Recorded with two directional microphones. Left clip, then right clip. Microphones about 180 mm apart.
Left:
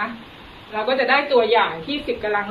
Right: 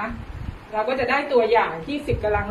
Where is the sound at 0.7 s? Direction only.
20° right (ahead or behind).